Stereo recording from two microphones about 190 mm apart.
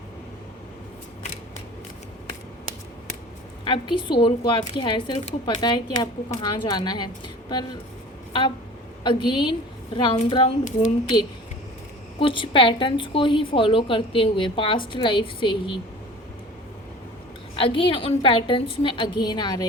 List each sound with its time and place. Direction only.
3.6 s a woman's voice: 25° left (ahead or behind)
8.3 s a woman's voice: 25° left (ahead or behind)
10.6 s speech: 40° left (ahead or behind)
12.2 s a woman's voice: 25° left (ahead or behind)
17.6 s a woman's voice: 25° left (ahead or behind)